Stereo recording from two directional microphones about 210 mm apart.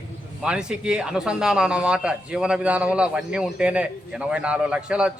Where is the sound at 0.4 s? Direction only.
5° right (ahead or behind).